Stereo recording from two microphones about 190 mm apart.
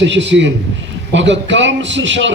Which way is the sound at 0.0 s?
70° right (ahead or behind).